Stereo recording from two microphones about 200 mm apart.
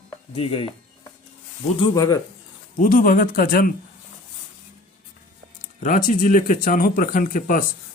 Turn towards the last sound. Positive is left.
turn(degrees=45)  # may be behind; listen again after turning